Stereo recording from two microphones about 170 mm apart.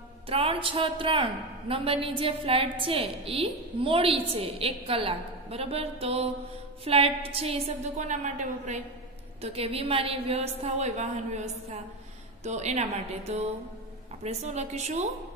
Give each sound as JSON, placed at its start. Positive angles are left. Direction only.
{"t": 0.3, "sound": "a woman's voice", "side_deg": -35}